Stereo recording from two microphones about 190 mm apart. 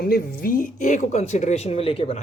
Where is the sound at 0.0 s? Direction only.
50° left (ahead or behind).